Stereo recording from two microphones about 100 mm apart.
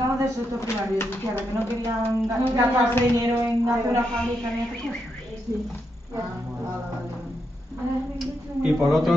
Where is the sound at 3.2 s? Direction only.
30° right (ahead or behind).